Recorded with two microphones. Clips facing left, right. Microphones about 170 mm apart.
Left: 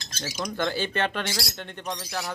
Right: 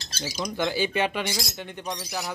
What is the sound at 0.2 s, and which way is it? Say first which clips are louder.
Speech: right 1 dB; 5° right (ahead or behind).